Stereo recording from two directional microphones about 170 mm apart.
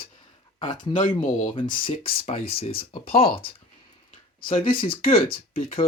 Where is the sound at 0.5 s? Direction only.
25° left (ahead or behind).